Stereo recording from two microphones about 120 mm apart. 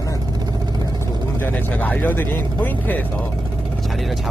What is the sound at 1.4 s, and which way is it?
Speech, 15° left (ahead or behind).